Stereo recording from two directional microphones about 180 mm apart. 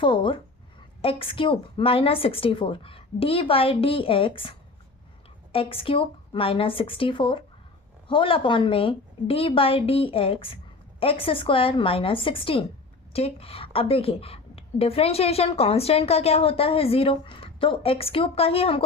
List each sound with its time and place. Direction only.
0.0 s a woman's voice: 30° left (ahead or behind)